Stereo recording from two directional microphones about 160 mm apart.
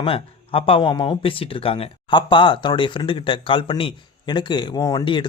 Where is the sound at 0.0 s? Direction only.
35° left (ahead or behind).